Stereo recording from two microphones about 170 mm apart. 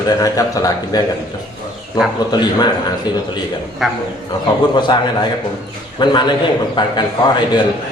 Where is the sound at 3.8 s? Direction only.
Centre (ahead or behind).